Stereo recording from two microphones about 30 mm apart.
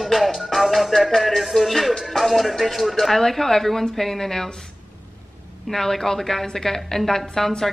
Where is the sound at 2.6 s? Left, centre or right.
Centre.